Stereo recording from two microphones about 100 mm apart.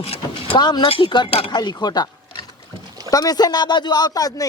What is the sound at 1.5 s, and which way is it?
Speech, 45° left (ahead or behind).